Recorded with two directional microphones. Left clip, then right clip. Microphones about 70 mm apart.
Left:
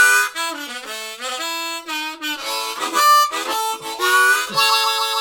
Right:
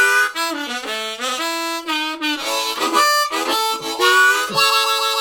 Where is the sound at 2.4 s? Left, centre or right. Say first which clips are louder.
Right 3 dB; centre.